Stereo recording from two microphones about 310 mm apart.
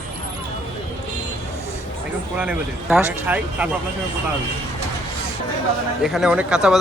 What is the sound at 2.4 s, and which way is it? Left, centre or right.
Speech, centre.